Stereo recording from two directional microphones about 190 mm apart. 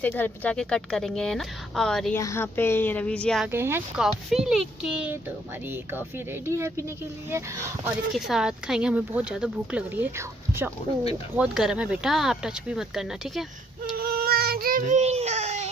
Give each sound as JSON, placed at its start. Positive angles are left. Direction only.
{"t": 0.0, "sound": "speech", "side_deg": 10}
{"t": 2.1, "sound": "speech", "side_deg": 15}
{"t": 3.5, "sound": "speech", "side_deg": -10}
{"t": 8.3, "sound": "speech", "side_deg": -5}
{"t": 11.3, "sound": "speech", "side_deg": -5}
{"t": 13.9, "sound": "baby cry", "side_deg": -55}